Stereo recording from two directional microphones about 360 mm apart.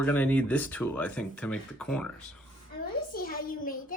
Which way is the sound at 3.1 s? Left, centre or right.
Left.